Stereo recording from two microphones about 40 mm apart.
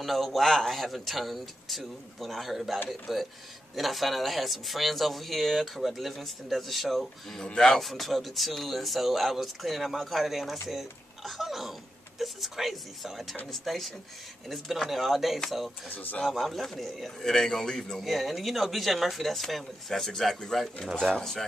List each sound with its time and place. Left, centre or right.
0.0 s a man's voice: centre
7.4 s speech: centre
7.8 s a man's voice: centre
15.9 s speech: left
16.3 s a man's voice: centre